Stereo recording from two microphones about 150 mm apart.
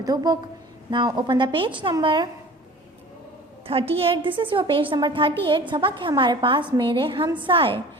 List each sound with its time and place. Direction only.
0.0 s a woman's voice: 25° right (ahead or behind)
3.7 s a woman's voice: 40° right (ahead or behind)